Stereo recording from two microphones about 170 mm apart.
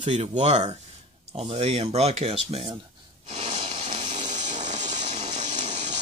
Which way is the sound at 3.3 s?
40° right (ahead or behind).